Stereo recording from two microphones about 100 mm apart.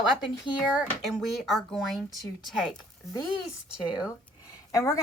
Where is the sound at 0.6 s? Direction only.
5° right (ahead or behind).